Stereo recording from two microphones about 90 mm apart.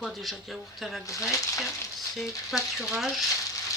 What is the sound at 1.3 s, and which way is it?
Frying, 35° left (ahead or behind).